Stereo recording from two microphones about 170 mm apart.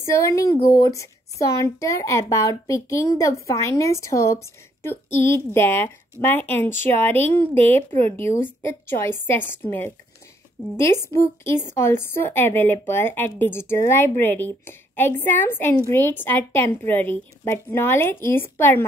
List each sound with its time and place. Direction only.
0.0 s a woman's voice: 20° left (ahead or behind)